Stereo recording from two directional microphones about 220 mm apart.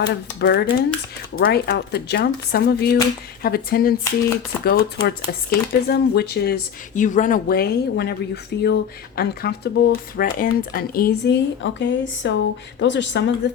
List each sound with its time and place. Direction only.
0.0 s a woman's voice: 50° left (ahead or behind)